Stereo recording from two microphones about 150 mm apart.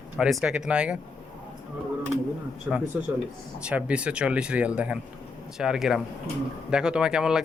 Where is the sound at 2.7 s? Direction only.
5° right (ahead or behind).